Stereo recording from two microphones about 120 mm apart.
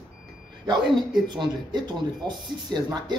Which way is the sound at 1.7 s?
40° right (ahead or behind).